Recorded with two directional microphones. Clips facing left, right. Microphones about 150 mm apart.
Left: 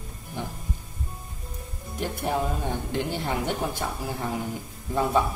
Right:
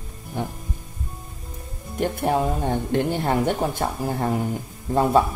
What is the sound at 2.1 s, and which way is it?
A woman's voice, 50° right (ahead or behind).